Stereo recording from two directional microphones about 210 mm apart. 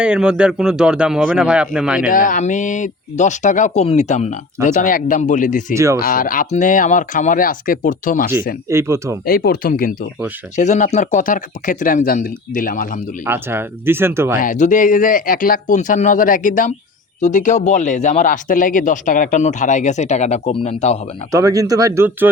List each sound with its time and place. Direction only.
0.0 s speech: 5° right (ahead or behind)
2.0 s speech: 40° left (ahead or behind)
5.7 s speech: 15° right (ahead or behind)
6.0 s speech: 45° left (ahead or behind)
8.7 s speech: 15° right (ahead or behind)
9.2 s speech: 45° left (ahead or behind)
13.2 s speech: 10° right (ahead or behind)
14.3 s speech: 40° left (ahead or behind)
21.3 s speech: 15° right (ahead or behind)